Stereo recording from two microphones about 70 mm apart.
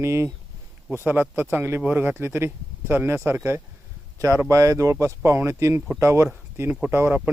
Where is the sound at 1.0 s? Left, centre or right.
Right.